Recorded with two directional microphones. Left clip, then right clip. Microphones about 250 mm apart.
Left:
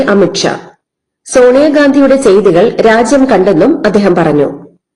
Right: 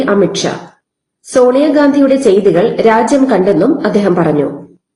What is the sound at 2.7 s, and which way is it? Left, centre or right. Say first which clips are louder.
A man's voice: left 2 dB; left.